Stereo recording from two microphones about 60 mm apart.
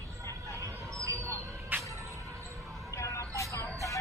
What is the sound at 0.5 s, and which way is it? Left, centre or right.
Vehicle, right.